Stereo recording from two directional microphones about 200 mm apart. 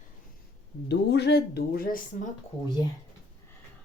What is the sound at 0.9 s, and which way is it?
Speech, 60° left (ahead or behind).